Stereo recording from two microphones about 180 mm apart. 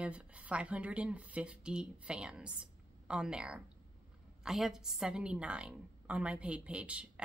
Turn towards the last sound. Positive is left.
turn(degrees=-5)  # may be behind; listen again after turning